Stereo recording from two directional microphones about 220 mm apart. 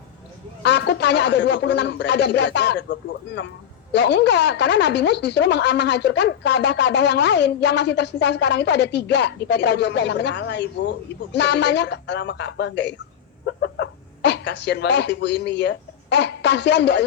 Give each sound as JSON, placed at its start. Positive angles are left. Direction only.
{"t": 0.6, "sound": "speech", "side_deg": 50}